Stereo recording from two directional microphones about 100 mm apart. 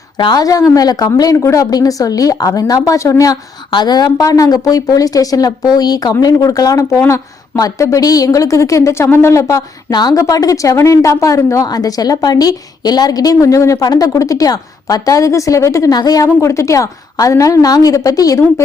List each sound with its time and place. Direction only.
0.2 s a woman's voice: 50° left (ahead or behind)
0.4 s speech: 35° left (ahead or behind)
3.7 s speech: 45° left (ahead or behind); by 9.6 s 30° left (ahead or behind)
9.9 s speech: 45° left (ahead or behind)